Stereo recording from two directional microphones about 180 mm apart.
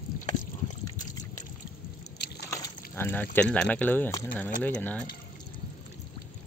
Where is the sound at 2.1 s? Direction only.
65° left (ahead or behind).